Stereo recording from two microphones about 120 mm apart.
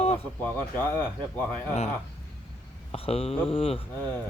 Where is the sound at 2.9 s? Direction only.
55° left (ahead or behind).